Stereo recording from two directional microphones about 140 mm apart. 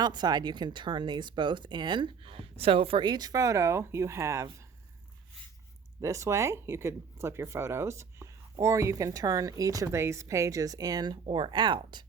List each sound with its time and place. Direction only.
0.0 s speech: 30° right (ahead or behind)
6.0 s speech: 20° right (ahead or behind)